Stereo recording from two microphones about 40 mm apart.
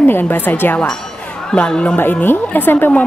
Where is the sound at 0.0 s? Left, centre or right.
Left.